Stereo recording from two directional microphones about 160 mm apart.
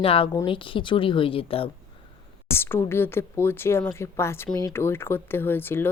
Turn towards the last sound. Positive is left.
turn(degrees=15)  # may be behind; listen again after turning